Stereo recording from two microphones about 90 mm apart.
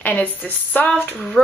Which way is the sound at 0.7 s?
20° left (ahead or behind).